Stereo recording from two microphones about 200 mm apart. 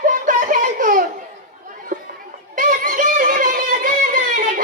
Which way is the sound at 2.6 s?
40° right (ahead or behind).